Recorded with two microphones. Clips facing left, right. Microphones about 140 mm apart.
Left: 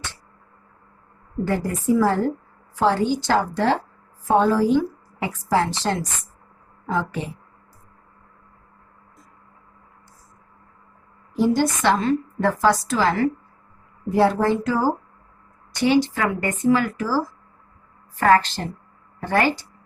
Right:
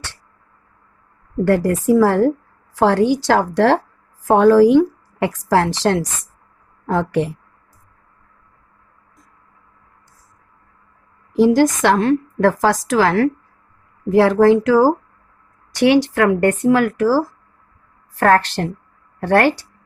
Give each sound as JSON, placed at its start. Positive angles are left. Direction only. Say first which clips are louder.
{"t": 1.5, "sound": "speech", "louder": "right 7 dB", "side_deg": -75}
{"t": 2.7, "sound": "a woman's voice", "louder": "right 5 dB", "side_deg": -85}
{"t": 6.8, "sound": "speech", "louder": "right 7 dB", "side_deg": -70}
{"t": 11.3, "sound": "a woman's voice", "louder": "right 7 dB", "side_deg": -90}
{"t": 14.1, "sound": "a woman's voice", "louder": "right 7 dB", "side_deg": -90}
{"t": 18.2, "sound": "speech", "louder": "right 3 dB", "side_deg": -70}